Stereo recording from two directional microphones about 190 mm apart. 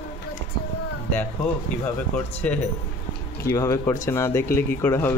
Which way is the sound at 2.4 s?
5° left (ahead or behind).